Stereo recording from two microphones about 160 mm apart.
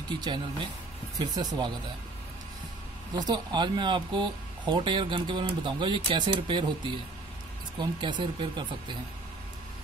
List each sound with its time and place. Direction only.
0.2 s speech: 30° right (ahead or behind)
3.2 s speech: 25° right (ahead or behind)
7.8 s speech: 30° right (ahead or behind)